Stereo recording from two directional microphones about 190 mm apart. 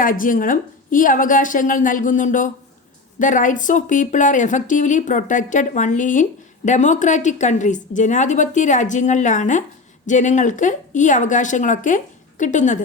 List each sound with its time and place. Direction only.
0.0 s a woman's voice: 45° left (ahead or behind)